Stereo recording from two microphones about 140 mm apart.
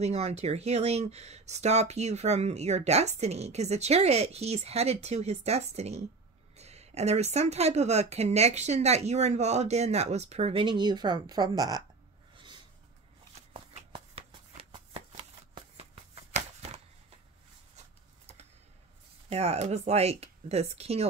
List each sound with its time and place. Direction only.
0.0 s speech: 50° right (ahead or behind); by 11.8 s 25° right (ahead or behind)
12.4 s a sound: 35° right (ahead or behind)
13.3 s shuffling cards: 45° right (ahead or behind)
19.2 s speech: 50° right (ahead or behind)